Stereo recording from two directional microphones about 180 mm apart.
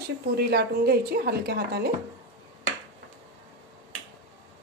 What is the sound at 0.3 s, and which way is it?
Speech, 65° right (ahead or behind).